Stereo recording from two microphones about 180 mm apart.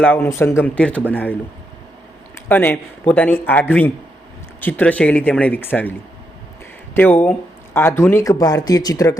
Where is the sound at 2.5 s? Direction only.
10° left (ahead or behind).